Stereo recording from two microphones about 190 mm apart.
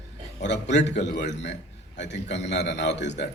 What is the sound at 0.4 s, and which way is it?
A man's voice, 65° left (ahead or behind).